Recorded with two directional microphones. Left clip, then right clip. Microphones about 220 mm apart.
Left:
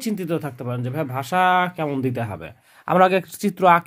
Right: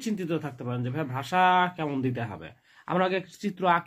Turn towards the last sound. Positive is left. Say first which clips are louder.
# left 9 dB
turn(degrees=45)  # may be behind; listen again after turning